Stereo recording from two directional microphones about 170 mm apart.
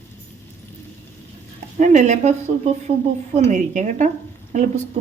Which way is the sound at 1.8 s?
45° right (ahead or behind).